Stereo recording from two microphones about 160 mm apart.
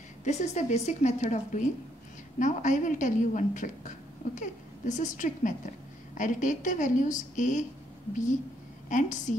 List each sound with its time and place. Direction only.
0.2 s a woman's voice: 45° left (ahead or behind)
8.8 s a woman's voice: 50° left (ahead or behind)